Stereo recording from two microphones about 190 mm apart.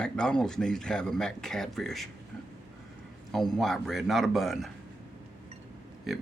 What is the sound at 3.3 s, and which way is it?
Speech, centre (ahead or behind).